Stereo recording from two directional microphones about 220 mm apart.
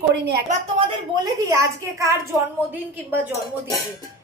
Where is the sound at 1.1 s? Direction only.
15° right (ahead or behind).